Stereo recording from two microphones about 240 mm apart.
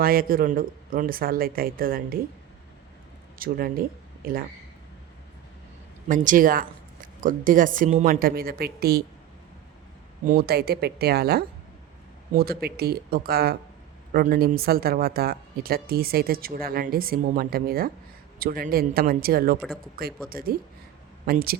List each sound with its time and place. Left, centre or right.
0.0 s speech: right
3.3 s speech: right
6.1 s speech: right
10.2 s speech: right